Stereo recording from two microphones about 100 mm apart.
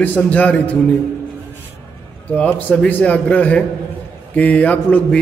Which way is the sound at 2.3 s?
15° left (ahead or behind).